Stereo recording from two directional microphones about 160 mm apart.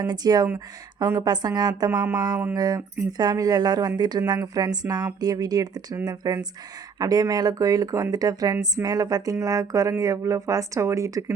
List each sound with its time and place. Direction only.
0.0 s speech: 25° right (ahead or behind)